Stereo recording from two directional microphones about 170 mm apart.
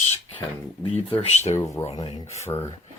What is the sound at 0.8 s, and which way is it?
Speech, 35° left (ahead or behind).